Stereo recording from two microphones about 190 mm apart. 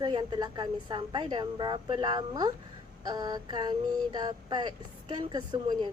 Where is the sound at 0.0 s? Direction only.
25° right (ahead or behind).